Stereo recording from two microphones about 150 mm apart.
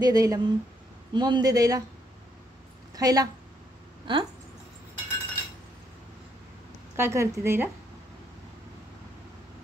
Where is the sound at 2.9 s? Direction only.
25° right (ahead or behind).